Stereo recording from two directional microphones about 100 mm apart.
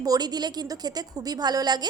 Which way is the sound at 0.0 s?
40° right (ahead or behind).